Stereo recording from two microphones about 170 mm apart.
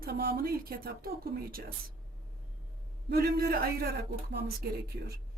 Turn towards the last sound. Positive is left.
turn(degrees=-65)  # may be behind; listen again after turning